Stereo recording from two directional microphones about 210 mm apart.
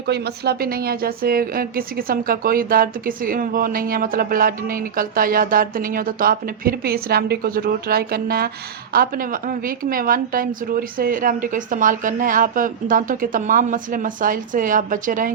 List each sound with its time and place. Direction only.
0.1 s a woman's voice: 50° right (ahead or behind)